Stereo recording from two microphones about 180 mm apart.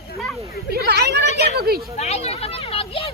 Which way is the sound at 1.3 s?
40° left (ahead or behind).